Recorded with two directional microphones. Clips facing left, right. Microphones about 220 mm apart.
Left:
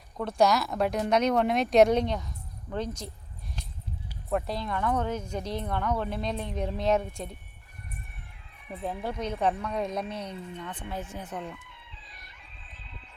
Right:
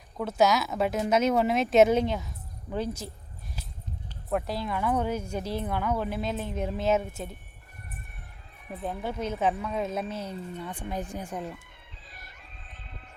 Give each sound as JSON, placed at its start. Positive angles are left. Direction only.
{"t": 0.2, "sound": "a woman's voice", "side_deg": -5}
{"t": 4.3, "sound": "a woman's voice", "side_deg": 0}
{"t": 8.7, "sound": "a woman's voice", "side_deg": 0}
{"t": 10.3, "sound": "speech", "side_deg": -40}
{"t": 10.6, "sound": "speech", "side_deg": -10}
{"t": 11.7, "sound": "chicken", "side_deg": -50}
{"t": 12.3, "sound": "horse", "side_deg": -50}